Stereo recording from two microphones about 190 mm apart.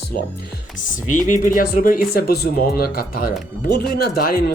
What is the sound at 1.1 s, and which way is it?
Speech, 45° left (ahead or behind).